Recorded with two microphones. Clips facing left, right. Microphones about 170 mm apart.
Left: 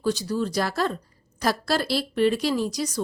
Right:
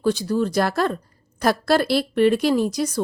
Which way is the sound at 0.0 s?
55° right (ahead or behind).